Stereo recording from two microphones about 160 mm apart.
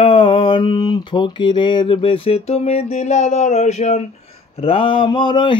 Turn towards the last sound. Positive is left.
turn(degrees=30)  # may be behind; listen again after turning